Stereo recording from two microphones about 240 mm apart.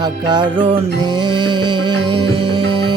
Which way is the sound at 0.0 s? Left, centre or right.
Centre.